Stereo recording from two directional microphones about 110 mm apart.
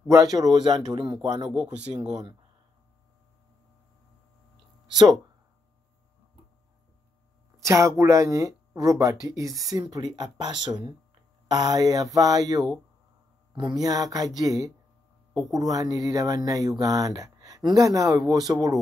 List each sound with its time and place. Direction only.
0.2 s speech: 35° right (ahead or behind)
1.8 s speech: 85° right
2.0 s speech: 35° right (ahead or behind)
7.6 s speech: 25° right (ahead or behind)